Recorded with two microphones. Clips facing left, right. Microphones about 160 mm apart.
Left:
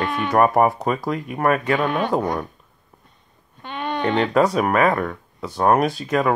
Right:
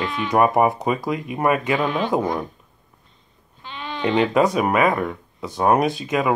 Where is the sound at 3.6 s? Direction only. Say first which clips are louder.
Left 2 dB; 55° left (ahead or behind).